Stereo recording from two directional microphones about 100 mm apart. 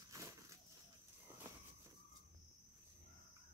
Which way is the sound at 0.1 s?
35° right (ahead or behind).